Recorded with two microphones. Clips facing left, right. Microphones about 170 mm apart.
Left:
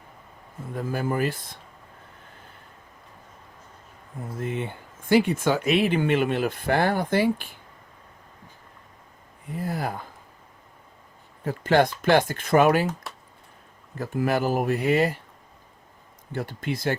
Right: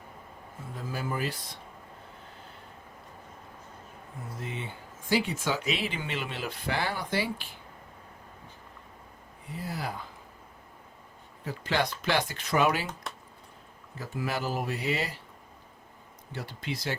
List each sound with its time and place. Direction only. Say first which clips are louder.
0.7 s speech: left 7 dB; 55° left (ahead or behind)
4.4 s speech: left 9 dB; 55° left (ahead or behind)
9.5 s speech: left 6 dB; 50° left (ahead or behind)
11.4 s speech: left 9 dB; 50° left (ahead or behind)
14.0 s speech: left 8 dB; 55° left (ahead or behind)
16.3 s speech: left 7 dB; 50° left (ahead or behind)